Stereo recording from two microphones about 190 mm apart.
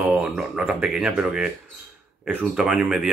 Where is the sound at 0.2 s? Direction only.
5° right (ahead or behind).